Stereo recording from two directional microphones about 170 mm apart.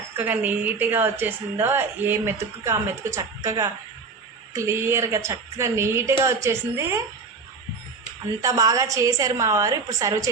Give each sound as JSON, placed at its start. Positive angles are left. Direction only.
{"t": 0.2, "sound": "a woman's voice", "side_deg": -10}
{"t": 8.4, "sound": "a woman's voice", "side_deg": -20}